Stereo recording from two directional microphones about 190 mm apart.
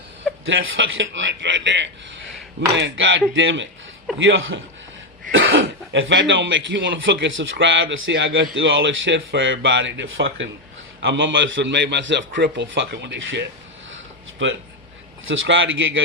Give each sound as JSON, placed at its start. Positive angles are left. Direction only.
{"t": 0.4, "sound": "a man's voice", "side_deg": -90}
{"t": 4.2, "sound": "a man's voice", "side_deg": -90}
{"t": 5.3, "sound": "a man's voice", "side_deg": -75}
{"t": 13.9, "sound": "a sound", "side_deg": -85}
{"t": 15.3, "sound": "a man's voice", "side_deg": -85}